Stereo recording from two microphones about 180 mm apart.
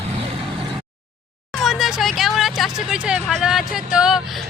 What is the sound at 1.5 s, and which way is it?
Speech, centre (ahead or behind).